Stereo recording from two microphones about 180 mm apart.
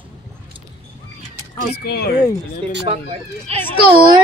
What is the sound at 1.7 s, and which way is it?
Speech, 65° left (ahead or behind).